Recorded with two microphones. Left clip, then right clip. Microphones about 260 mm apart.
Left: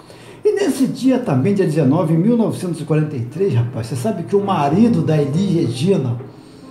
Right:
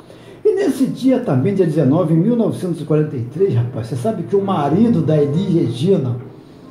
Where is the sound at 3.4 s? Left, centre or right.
Left.